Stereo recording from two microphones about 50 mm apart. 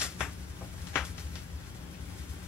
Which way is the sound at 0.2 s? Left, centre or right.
Centre.